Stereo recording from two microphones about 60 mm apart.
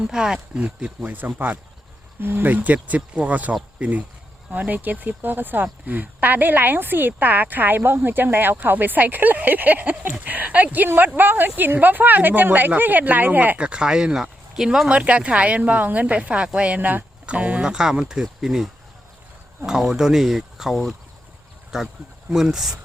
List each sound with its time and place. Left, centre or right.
0.0 s speech: centre; by 13.6 s right
13.6 s speech: centre
17.6 s speech: centre